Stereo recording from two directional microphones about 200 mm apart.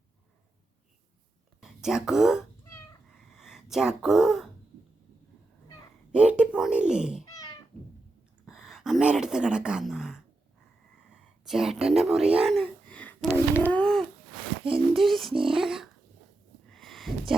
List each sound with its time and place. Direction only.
1.6 s speech: centre (ahead or behind)
6.1 s speech: 5° right (ahead or behind)
8.4 s speech: centre (ahead or behind)
13.7 s a sound: 5° left (ahead or behind)
14.7 s speech: centre (ahead or behind)
16.6 s a sound: centre (ahead or behind)